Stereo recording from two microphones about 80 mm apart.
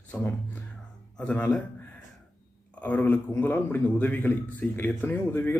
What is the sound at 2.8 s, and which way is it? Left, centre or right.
A man's voice, left.